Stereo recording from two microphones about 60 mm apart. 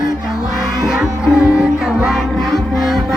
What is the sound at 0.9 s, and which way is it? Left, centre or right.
Music, centre.